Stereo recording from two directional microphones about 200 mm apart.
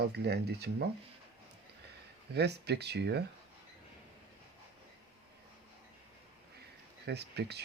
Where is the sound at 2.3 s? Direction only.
55° right (ahead or behind).